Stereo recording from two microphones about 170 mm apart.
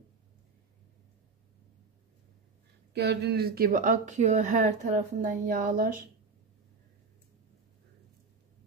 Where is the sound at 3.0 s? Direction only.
70° right (ahead or behind).